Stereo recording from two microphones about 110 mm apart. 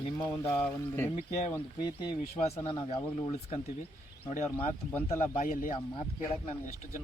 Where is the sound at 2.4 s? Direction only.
65° left (ahead or behind).